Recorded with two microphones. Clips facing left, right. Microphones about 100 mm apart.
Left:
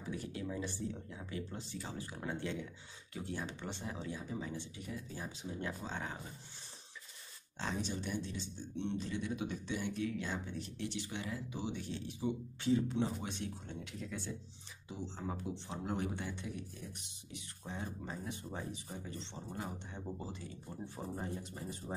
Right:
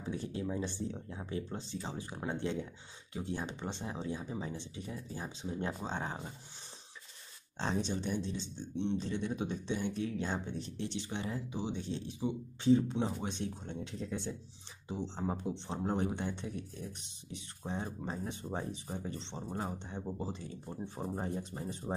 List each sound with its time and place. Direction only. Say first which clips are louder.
0.0 s speech: right 4 dB; 30° right (ahead or behind)
7.5 s speech: right 4 dB; 30° right (ahead or behind)